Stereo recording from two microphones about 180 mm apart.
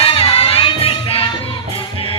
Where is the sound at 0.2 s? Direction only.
30° left (ahead or behind).